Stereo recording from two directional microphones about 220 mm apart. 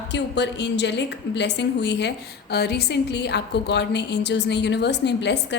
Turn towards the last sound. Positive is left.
turn(degrees=50)  # may be behind; listen again after turning